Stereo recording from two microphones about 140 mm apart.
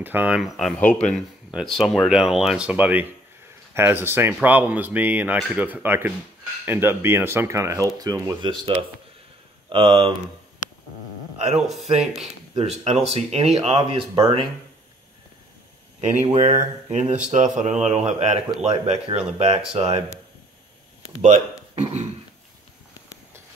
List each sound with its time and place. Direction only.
0.0 s speech: 15° right (ahead or behind)
0.7 s speech: 10° left (ahead or behind); by 10.1 s 40° right (ahead or behind)
11.6 s speech: centre (ahead or behind)
12.5 s speech: 50° right (ahead or behind)
16.0 s speech: 55° right (ahead or behind)